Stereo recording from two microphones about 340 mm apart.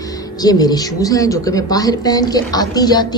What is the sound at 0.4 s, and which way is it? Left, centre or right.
A woman's voice, centre.